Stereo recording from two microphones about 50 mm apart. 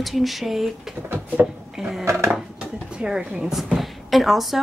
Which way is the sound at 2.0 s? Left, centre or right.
Right.